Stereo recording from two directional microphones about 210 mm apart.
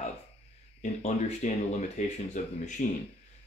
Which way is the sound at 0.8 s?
35° left (ahead or behind).